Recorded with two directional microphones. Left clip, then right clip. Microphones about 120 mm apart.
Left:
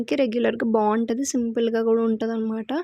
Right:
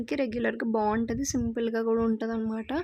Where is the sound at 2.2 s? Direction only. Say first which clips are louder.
Left 5 dB; 30° left (ahead or behind).